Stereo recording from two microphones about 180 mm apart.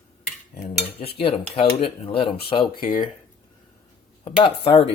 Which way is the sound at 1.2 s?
30° left (ahead or behind).